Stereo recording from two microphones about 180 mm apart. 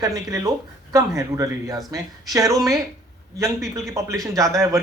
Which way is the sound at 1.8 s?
20° right (ahead or behind).